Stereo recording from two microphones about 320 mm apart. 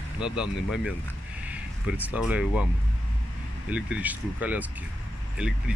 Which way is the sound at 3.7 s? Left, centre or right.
Centre.